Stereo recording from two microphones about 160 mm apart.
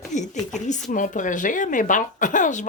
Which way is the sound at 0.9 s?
55° left (ahead or behind).